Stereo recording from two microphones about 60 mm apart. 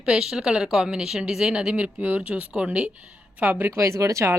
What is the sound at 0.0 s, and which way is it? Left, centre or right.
Speech, centre.